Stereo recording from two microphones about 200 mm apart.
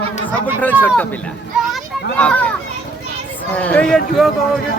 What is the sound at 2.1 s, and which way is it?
Children playing, 5° left (ahead or behind).